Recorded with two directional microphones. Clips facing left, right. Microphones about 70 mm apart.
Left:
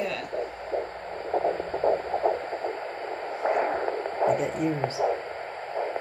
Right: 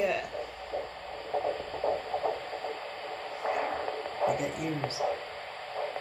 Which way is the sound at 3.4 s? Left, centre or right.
Left.